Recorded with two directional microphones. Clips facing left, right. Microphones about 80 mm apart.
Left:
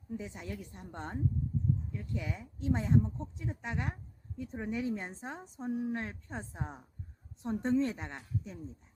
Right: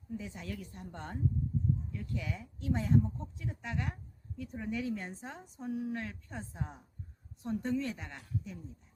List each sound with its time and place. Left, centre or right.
0.2 s a woman's voice: left